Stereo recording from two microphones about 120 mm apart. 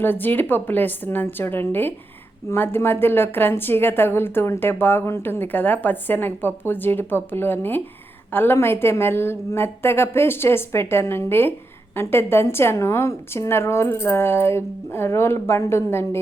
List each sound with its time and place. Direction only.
0.0 s a woman's voice: 15° left (ahead or behind)